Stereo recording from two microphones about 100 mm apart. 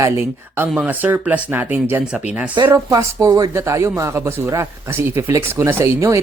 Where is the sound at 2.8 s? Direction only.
35° right (ahead or behind).